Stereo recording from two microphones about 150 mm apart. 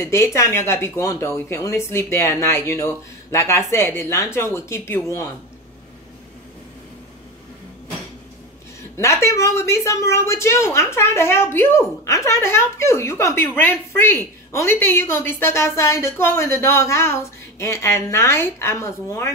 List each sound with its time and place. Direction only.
0.0 s a woman's voice: 20° left (ahead or behind)
8.9 s a woman's voice: 20° left (ahead or behind)